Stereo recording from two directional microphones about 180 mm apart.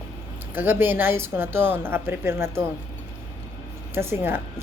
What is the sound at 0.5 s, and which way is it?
A woman's voice, 10° right (ahead or behind).